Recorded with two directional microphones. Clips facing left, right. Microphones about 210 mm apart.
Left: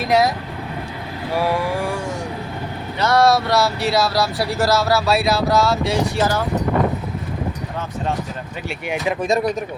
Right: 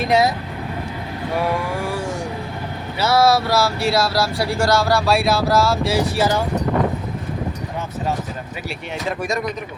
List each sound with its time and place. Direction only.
0.0 s speech: centre (ahead or behind)
1.4 s speech: centre (ahead or behind)
3.0 s speech: 5° right (ahead or behind)